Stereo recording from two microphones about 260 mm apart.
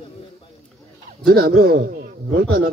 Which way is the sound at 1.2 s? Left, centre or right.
Right.